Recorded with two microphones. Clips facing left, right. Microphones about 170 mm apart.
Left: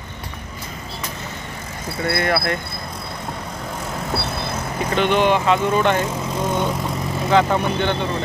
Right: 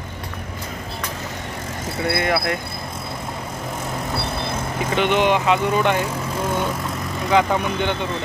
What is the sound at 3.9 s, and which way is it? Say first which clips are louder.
Vehicle: left 1 dB; 5° left (ahead or behind).